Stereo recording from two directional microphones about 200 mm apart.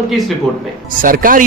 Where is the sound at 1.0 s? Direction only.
45° right (ahead or behind).